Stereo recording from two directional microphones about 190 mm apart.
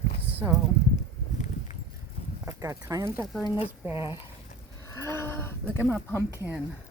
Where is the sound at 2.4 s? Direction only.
15° right (ahead or behind).